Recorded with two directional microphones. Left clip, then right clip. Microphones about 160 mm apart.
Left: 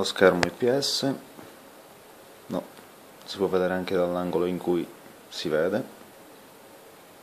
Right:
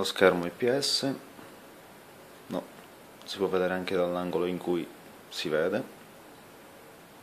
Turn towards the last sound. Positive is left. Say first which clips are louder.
# left 3 dB
turn(degrees=5)  # may be behind; listen again after turning